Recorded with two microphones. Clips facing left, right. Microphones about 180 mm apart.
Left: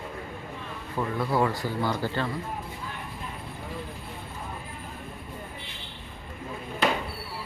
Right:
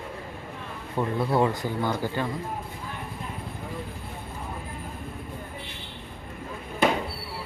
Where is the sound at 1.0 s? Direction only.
25° right (ahead or behind).